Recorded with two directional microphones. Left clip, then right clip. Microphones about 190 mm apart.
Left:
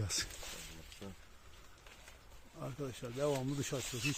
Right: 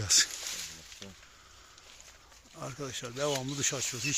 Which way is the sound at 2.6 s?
20° right (ahead or behind).